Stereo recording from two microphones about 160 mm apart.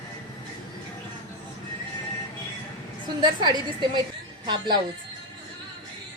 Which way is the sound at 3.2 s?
25° right (ahead or behind).